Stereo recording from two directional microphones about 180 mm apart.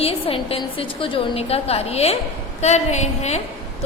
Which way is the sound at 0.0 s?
30° left (ahead or behind).